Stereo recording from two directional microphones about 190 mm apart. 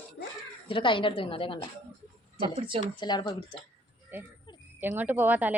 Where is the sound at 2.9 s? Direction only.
25° left (ahead or behind).